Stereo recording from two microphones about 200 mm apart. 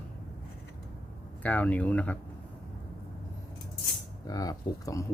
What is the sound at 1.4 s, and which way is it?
Speech, 10° left (ahead or behind).